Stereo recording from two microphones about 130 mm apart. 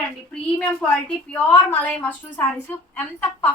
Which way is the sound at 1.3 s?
10° left (ahead or behind).